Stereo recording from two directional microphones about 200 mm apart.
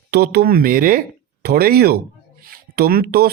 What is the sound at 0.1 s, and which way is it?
Speech, 50° right (ahead or behind).